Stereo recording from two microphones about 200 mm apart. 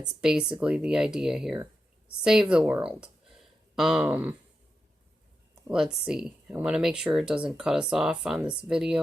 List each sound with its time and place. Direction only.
0.2 s speech: 5° right (ahead or behind)
5.7 s speech: 5° right (ahead or behind)